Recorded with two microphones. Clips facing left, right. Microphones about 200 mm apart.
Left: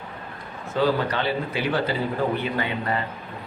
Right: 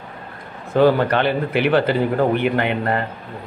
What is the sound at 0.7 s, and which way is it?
Speech, 55° right (ahead or behind).